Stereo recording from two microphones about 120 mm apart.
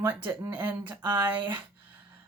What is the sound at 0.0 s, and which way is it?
Speech, 15° right (ahead or behind).